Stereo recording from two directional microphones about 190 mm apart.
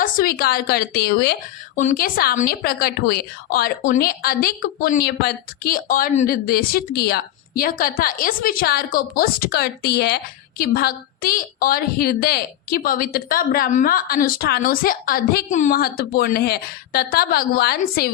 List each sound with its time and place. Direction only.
0.0 s a woman's voice: 45° left (ahead or behind)
1.7 s speech: 40° left (ahead or behind); by 18.1 s 55° left (ahead or behind)